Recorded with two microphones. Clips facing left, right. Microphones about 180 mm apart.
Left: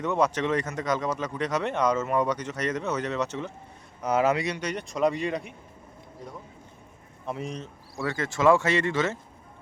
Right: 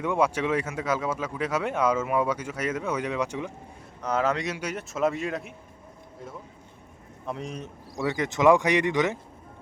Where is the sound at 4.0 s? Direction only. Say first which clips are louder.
Left 2 dB; 10° left (ahead or behind).